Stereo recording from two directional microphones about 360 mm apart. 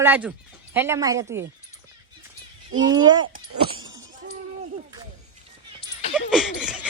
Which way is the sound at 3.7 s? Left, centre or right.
Right.